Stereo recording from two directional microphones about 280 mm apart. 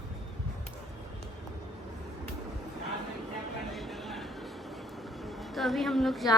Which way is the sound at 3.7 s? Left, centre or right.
Centre.